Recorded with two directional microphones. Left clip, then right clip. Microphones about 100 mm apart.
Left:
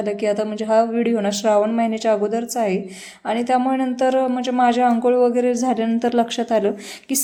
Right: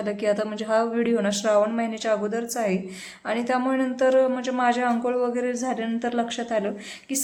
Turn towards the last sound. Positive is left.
turn(degrees=55)  # may be behind; listen again after turning